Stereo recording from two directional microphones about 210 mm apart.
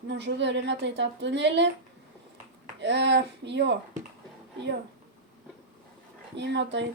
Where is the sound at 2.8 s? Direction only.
55° right (ahead or behind).